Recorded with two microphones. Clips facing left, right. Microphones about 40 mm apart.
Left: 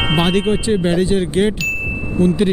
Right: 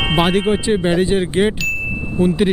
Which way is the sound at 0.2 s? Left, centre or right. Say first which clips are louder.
Right 2 dB; centre.